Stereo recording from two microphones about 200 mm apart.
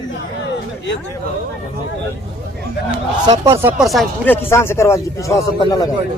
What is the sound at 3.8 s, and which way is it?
Speech, centre (ahead or behind).